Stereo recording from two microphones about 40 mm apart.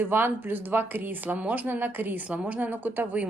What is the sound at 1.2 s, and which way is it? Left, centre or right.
A man's voice, right.